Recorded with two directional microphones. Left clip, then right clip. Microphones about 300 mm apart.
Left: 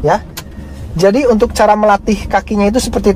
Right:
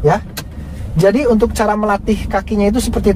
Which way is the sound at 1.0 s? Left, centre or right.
Left.